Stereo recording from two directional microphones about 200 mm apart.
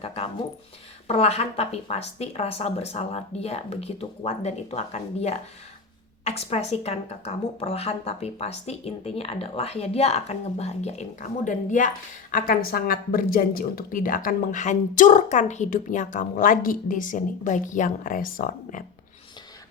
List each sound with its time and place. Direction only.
0.0 s a woman's voice: 30° left (ahead or behind); by 18.9 s 45° left (ahead or behind)